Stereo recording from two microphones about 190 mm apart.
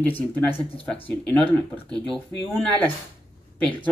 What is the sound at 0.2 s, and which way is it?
Speech, 5° left (ahead or behind).